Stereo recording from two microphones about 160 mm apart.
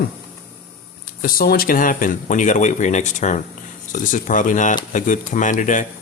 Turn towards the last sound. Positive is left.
turn(degrees=55)  # may be behind; listen again after turning